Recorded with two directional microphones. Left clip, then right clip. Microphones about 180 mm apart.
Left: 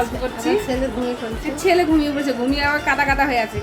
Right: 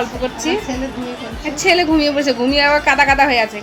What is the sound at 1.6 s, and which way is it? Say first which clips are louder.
A woman's voice: right 3 dB; 25° right (ahead or behind).